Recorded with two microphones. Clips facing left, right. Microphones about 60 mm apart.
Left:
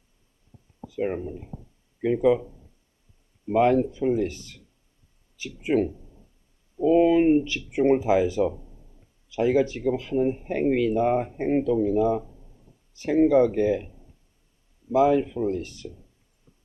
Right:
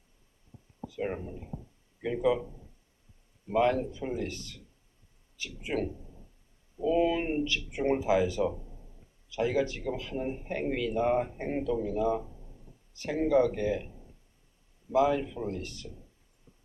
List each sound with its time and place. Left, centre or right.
0.9 s speech: left
3.5 s speech: left
4.0 s speech: centre
5.4 s speech: left
6.8 s speech: left
14.9 s speech: left